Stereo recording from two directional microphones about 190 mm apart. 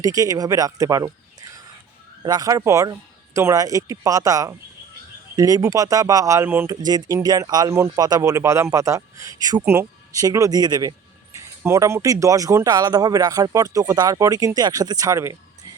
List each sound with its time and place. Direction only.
0.0 s speech: 20° right (ahead or behind)
2.2 s speech: 20° right (ahead or behind)